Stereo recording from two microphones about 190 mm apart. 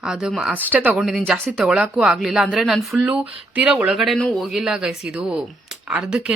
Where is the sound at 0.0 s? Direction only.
5° right (ahead or behind).